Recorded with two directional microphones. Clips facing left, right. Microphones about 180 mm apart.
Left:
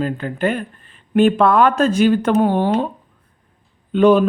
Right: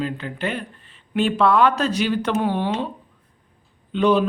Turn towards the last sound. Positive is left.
turn(degrees=50)  # may be behind; listen again after turning